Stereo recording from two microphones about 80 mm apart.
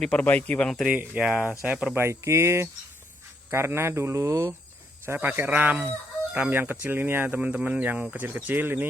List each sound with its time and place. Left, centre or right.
0.1 s speech: centre
0.9 s speech: centre
2.0 s speech: right
5.0 s speech: right